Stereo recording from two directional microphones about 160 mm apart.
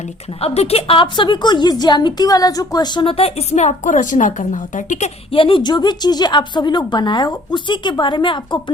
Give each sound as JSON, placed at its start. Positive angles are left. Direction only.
{"t": 0.4, "sound": "a woman's voice", "side_deg": 40}